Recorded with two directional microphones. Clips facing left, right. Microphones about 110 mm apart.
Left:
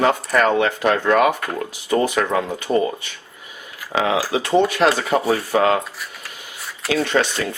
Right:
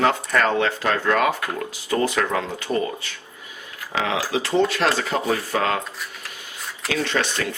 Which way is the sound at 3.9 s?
25° left (ahead or behind).